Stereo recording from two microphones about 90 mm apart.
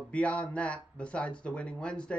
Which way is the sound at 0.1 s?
15° left (ahead or behind).